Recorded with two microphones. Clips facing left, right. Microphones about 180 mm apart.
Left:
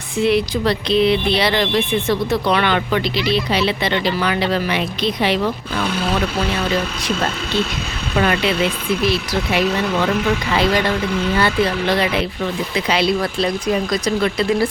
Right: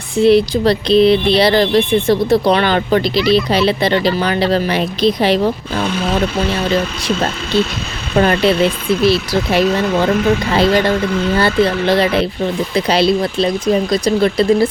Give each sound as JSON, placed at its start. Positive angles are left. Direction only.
{"t": 0.2, "sound": "speech", "side_deg": -30}
{"t": 8.1, "sound": "speech", "side_deg": -35}